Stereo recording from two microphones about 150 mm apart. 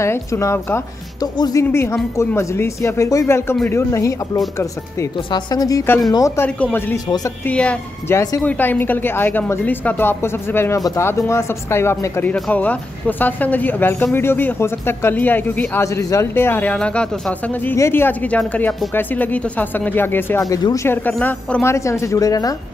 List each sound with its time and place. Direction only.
0.0 s speech: 20° left (ahead or behind)
20.4 s speech: 25° left (ahead or behind)